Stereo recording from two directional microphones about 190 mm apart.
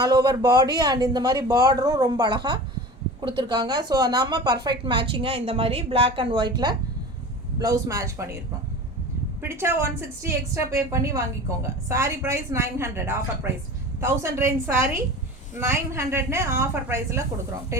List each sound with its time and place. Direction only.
0.0 s speech: 20° right (ahead or behind)
7.6 s a woman's voice: 15° right (ahead or behind)
9.4 s a woman's voice: 15° right (ahead or behind)